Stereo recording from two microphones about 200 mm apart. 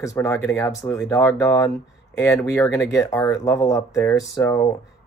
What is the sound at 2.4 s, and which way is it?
Speech, 5° left (ahead or behind).